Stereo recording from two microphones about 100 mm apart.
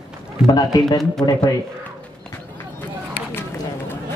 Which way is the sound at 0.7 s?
40° left (ahead or behind).